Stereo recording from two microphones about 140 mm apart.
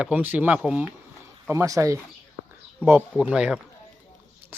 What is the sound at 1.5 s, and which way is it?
Speech, 20° right (ahead or behind).